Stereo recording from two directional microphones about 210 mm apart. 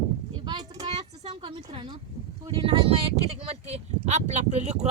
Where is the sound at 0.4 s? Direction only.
20° right (ahead or behind).